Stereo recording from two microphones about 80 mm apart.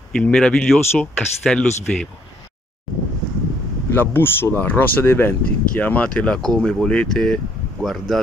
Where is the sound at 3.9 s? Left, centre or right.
Left.